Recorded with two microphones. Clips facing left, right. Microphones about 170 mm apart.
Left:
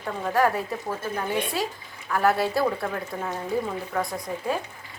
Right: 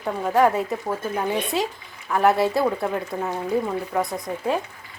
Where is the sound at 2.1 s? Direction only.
20° right (ahead or behind).